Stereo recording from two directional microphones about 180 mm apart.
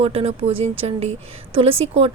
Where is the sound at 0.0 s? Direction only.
35° right (ahead or behind).